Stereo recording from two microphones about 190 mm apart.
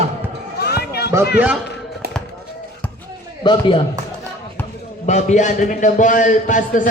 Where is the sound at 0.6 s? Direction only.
55° left (ahead or behind).